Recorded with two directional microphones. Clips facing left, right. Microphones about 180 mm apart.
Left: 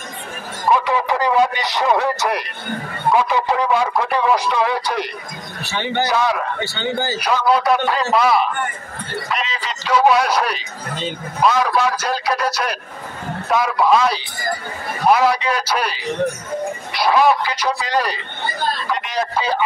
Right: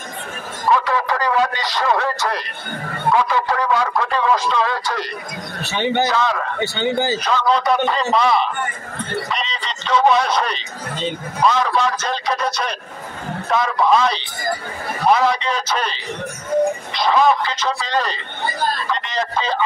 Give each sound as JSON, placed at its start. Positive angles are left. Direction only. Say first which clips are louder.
{"t": 0.7, "sound": "a man's voice", "louder": "left 1 dB", "side_deg": 15}
{"t": 5.6, "sound": "speech", "louder": "right 2 dB", "side_deg": -20}
{"t": 6.0, "sound": "a man's voice", "louder": "left 1 dB", "side_deg": 10}
{"t": 6.6, "sound": "speech", "louder": "right 3 dB", "side_deg": -15}
{"t": 7.2, "sound": "a man's voice", "louder": "left 1 dB", "side_deg": 10}